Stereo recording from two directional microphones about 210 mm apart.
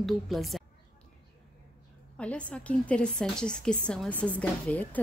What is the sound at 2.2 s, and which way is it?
A woman's voice, 5° left (ahead or behind).